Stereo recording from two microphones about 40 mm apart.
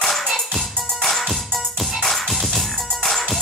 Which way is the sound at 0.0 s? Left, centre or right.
Centre.